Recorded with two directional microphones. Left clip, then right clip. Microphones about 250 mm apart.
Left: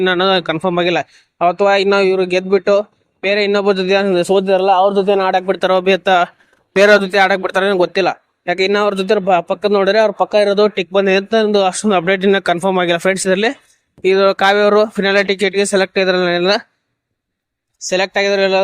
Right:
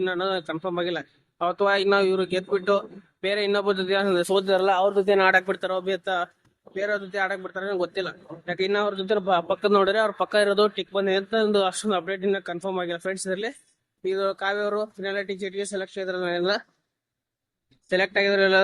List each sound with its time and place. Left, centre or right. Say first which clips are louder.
0.0 s speech: left 12 dB; left
17.8 s speech: left 7 dB; centre